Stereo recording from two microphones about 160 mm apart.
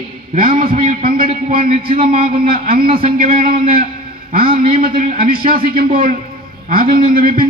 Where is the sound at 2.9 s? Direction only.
35° right (ahead or behind).